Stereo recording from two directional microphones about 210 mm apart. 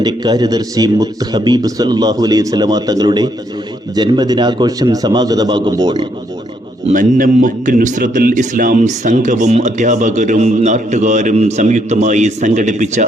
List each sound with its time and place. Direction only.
0.0 s a man's voice: 20° right (ahead or behind)
6.8 s speech: 40° right (ahead or behind)